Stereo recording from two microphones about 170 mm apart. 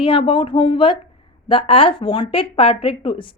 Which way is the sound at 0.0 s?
30° left (ahead or behind).